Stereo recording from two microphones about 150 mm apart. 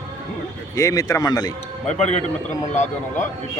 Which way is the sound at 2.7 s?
55° left (ahead or behind).